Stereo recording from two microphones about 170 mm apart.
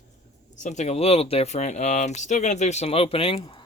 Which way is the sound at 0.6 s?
45° left (ahead or behind).